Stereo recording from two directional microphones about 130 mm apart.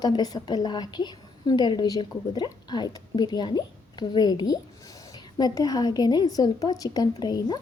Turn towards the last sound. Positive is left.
turn(degrees=30)  # may be behind; listen again after turning